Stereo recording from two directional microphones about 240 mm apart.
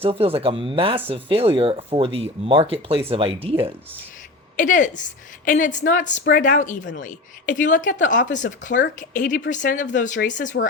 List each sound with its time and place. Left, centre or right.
0.0 s speech: right
4.5 s a woman's voice: left